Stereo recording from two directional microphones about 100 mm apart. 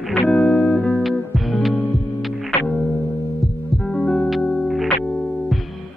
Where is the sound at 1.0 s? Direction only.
Centre (ahead or behind).